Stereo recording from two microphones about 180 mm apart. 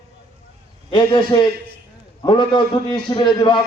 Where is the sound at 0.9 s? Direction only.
25° left (ahead or behind).